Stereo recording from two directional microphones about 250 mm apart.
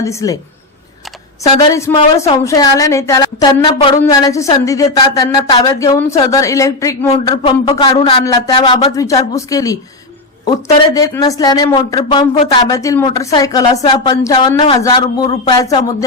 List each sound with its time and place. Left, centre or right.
0.0 s speech: centre
2.2 s speech: centre